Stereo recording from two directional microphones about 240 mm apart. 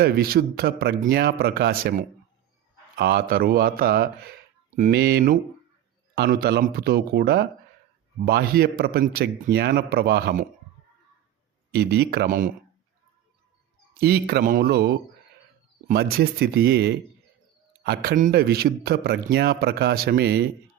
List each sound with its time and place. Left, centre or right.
0.0 s speech: right
11.7 s speech: right
13.9 s speech: right